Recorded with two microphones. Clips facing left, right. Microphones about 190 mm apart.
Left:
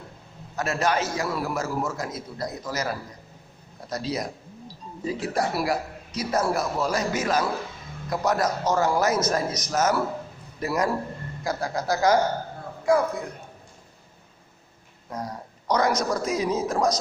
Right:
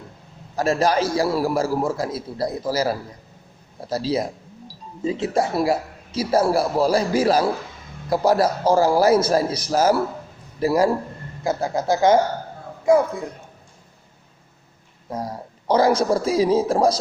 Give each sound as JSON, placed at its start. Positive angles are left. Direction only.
{"t": 0.5, "sound": "a man's voice", "side_deg": -30}
{"t": 15.1, "sound": "a man's voice", "side_deg": -30}